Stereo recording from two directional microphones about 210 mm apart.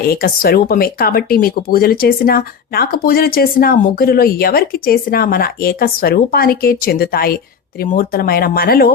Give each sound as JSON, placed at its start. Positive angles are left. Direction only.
{"t": 0.0, "sound": "speech", "side_deg": 45}